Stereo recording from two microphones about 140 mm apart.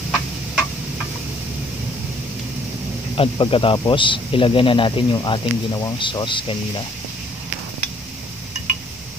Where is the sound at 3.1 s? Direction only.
40° left (ahead or behind).